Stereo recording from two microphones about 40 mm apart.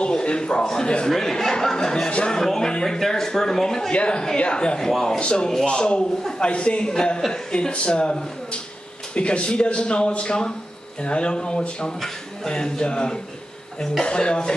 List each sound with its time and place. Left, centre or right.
0.0 s speech: left
1.1 s speech: centre
2.0 s speech: left
2.3 s speech: centre
3.9 s speech: left; by 5.2 s centre
5.2 s speech: left